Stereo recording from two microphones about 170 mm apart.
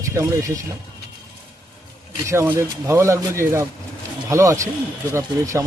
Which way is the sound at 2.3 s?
15° right (ahead or behind).